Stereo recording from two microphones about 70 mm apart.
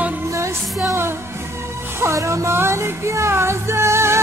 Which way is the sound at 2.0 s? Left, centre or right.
Right.